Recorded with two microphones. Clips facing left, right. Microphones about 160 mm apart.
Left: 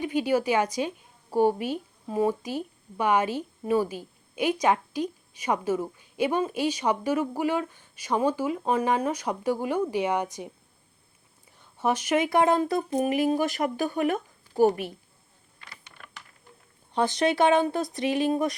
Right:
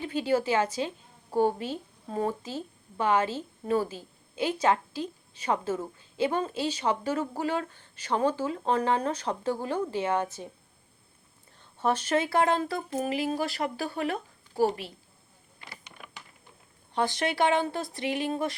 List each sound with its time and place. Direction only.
0.0 s a woman's voice: 15° left (ahead or behind)
11.8 s speech: 10° left (ahead or behind)
14.1 s a sound: 20° left (ahead or behind)
15.8 s typing: 15° right (ahead or behind)
16.9 s speech: 20° left (ahead or behind)